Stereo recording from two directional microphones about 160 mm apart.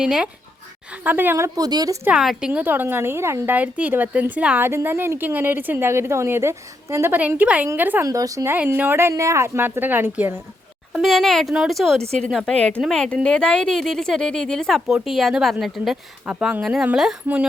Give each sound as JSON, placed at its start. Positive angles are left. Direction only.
{"t": 0.0, "sound": "a woman's voice", "side_deg": -5}
{"t": 2.0, "sound": "a woman's voice", "side_deg": -5}
{"t": 10.9, "sound": "speech", "side_deg": 0}